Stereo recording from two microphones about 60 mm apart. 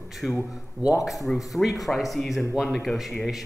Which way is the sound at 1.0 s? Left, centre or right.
Centre.